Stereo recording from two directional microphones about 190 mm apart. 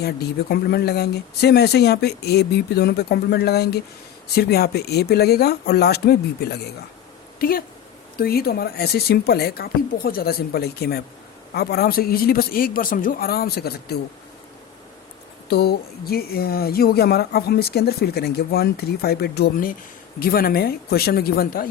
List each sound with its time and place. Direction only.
0.0 s a man's voice: 55° left (ahead or behind)
15.4 s a man's voice: 55° left (ahead or behind)